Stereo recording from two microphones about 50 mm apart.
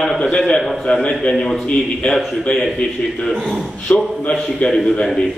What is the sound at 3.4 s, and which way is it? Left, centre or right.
Speech, centre.